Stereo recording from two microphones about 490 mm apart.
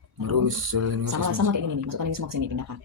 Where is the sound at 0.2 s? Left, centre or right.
Right.